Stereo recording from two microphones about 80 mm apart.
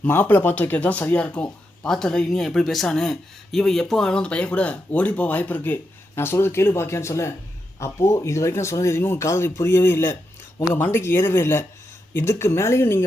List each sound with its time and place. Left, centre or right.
0.1 s speech: left